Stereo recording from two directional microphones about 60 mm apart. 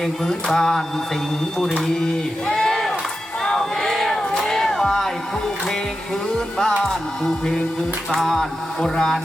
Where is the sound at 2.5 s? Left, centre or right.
Centre.